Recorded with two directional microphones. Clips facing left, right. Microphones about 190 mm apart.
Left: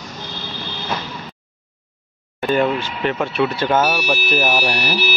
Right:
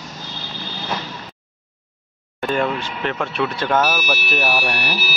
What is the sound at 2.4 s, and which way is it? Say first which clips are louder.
Speech: left 3 dB; centre (ahead or behind).